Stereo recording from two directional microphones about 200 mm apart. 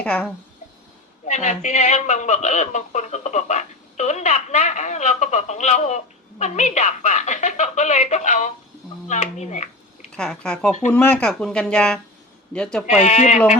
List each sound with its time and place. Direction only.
0.0 s speech: 5° left (ahead or behind)
1.3 s speech: 35° left (ahead or behind)
10.2 s speech: 5° left (ahead or behind)
12.9 s speech: 35° left (ahead or behind)